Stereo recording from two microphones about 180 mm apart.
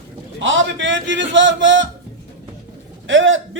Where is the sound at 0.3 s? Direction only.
90° right.